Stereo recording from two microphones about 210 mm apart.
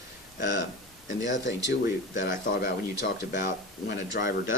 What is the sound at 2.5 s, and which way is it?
Speech, 45° left (ahead or behind).